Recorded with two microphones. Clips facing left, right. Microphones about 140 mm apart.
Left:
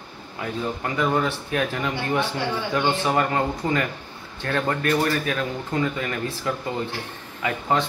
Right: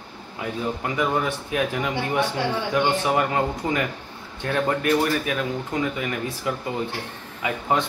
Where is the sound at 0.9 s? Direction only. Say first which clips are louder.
Left 2 dB; 10° right (ahead or behind).